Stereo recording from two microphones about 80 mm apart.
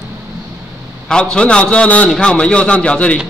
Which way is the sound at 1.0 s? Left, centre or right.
Centre.